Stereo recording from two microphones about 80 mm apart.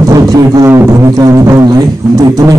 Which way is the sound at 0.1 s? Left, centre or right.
Right.